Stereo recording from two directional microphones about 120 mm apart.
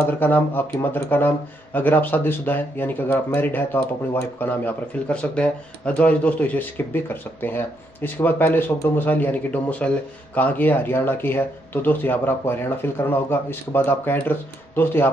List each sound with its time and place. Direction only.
0.2 s speech: 15° left (ahead or behind)